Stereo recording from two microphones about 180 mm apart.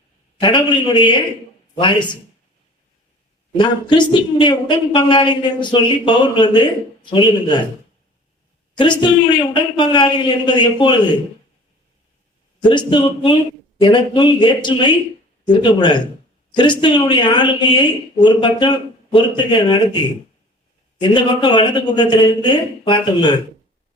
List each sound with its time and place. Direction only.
0.4 s speech: 25° left (ahead or behind)
3.6 s speech: 25° left (ahead or behind)
8.8 s speech: 25° left (ahead or behind)
12.6 s speech: 25° left (ahead or behind)
21.0 s speech: 25° left (ahead or behind)